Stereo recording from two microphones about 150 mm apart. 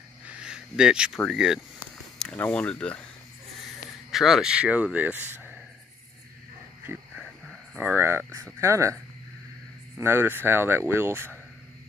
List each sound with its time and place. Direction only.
0.3 s speech: 5° right (ahead or behind)
2.1 s speech: 10° left (ahead or behind)
4.1 s speech: centre (ahead or behind)
5.2 s a sound: 10° right (ahead or behind)
6.9 s speech: 15° right (ahead or behind)